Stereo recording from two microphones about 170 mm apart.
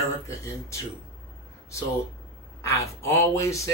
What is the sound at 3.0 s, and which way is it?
Speech, 15° left (ahead or behind).